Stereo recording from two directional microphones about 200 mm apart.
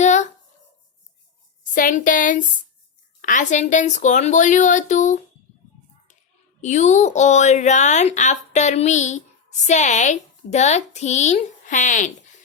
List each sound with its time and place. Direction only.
0.0 s a sound: 35° left (ahead or behind)
1.7 s speech: 40° left (ahead or behind)
6.6 s speech: 35° left (ahead or behind)